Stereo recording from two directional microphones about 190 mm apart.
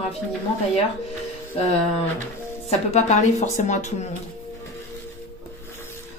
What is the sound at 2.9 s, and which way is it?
Speech, 40° left (ahead or behind).